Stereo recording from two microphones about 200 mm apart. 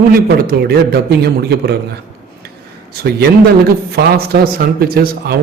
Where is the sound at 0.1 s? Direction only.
50° right (ahead or behind).